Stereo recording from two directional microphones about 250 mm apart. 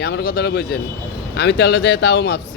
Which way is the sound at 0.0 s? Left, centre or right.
Left.